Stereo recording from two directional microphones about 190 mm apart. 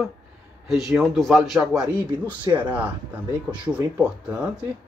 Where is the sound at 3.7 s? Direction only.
5° right (ahead or behind).